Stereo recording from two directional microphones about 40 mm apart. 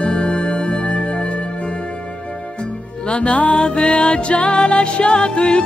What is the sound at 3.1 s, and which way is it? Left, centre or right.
Music, left.